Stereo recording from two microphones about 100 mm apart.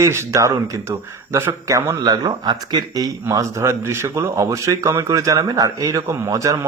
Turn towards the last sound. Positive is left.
turn(degrees=-35)  # may be behind; listen again after turning